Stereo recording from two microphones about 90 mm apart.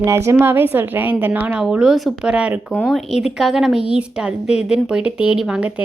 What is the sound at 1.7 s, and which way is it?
A woman's voice, 5° right (ahead or behind).